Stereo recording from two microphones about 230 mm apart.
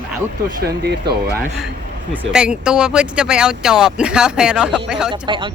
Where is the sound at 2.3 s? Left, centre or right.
Centre.